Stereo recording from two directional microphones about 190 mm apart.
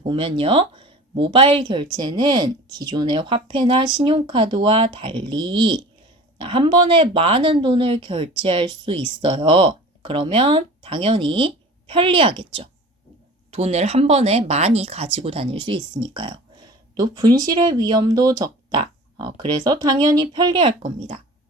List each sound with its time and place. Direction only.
0.0 s speech: 30° right (ahead or behind)